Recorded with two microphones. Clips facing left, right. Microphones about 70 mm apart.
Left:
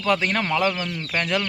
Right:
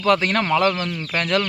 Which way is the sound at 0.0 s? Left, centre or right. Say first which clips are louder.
Right 3 dB; centre.